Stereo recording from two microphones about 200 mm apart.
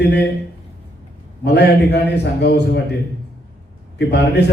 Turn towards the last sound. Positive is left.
turn(degrees=55)  # may be behind; listen again after turning